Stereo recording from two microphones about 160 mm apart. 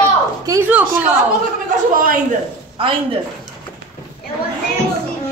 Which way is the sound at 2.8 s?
35° right (ahead or behind).